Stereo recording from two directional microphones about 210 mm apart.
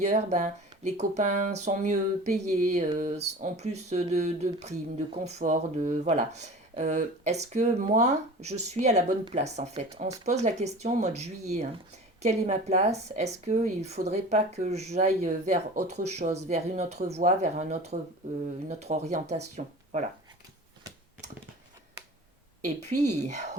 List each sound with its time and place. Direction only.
0.0 s speech: 35° right (ahead or behind)
22.6 s speech: 35° right (ahead or behind)